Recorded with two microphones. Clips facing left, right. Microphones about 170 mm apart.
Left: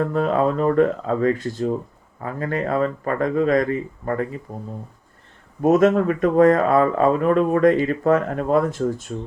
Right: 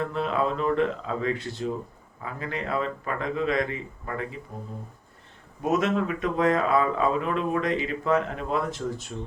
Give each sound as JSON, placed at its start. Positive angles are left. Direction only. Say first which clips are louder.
{"t": 0.0, "sound": "speech", "louder": "left 7 dB", "side_deg": 45}
{"t": 5.6, "sound": "speech", "louder": "left 9 dB", "side_deg": 45}